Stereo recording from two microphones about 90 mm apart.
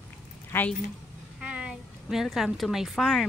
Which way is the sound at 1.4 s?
10° right (ahead or behind).